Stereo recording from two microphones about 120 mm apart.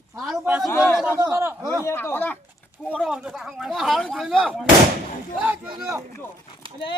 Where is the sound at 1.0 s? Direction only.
15° right (ahead or behind).